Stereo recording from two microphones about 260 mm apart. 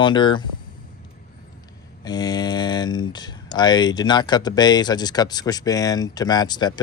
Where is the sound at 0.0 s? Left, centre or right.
Centre.